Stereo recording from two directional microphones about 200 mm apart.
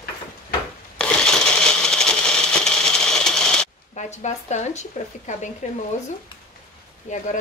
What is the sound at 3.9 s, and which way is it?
Speech, 35° left (ahead or behind).